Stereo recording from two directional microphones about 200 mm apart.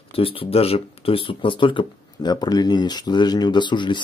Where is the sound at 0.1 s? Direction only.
30° left (ahead or behind).